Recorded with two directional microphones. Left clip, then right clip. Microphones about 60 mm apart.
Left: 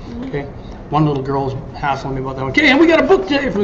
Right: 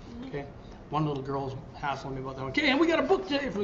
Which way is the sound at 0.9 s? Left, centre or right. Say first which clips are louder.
Left 14 dB; left.